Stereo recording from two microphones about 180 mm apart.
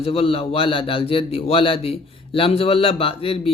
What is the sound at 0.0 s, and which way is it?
A man's voice, 30° left (ahead or behind).